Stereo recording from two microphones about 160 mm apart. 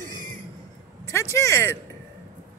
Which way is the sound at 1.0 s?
15° left (ahead or behind).